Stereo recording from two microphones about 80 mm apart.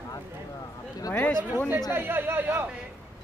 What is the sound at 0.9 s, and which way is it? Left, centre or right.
Speech, left.